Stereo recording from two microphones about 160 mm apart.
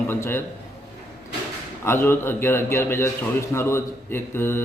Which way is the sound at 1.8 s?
15° left (ahead or behind).